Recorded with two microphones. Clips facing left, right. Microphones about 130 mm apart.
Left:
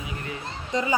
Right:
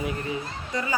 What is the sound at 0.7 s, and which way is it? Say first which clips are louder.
Speech: left 4 dB; 20° left (ahead or behind).